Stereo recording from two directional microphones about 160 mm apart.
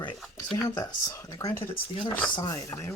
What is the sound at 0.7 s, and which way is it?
Speech, 20° left (ahead or behind).